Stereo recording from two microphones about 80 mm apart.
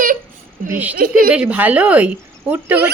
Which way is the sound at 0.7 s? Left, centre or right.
Centre.